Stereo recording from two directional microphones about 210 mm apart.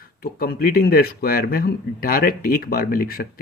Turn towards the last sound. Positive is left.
turn(degrees=45)  # may be behind; listen again after turning